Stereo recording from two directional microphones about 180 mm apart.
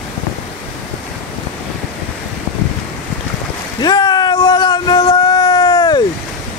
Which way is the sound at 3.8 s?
25° left (ahead or behind).